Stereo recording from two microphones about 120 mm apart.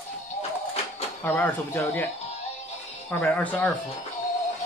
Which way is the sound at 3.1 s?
15° left (ahead or behind).